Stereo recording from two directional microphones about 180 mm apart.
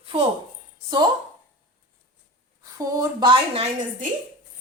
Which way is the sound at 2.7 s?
20° right (ahead or behind).